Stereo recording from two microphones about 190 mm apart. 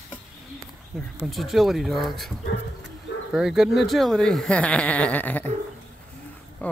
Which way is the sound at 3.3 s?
5° right (ahead or behind).